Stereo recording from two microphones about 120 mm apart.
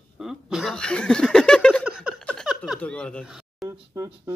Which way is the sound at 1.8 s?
10° right (ahead or behind).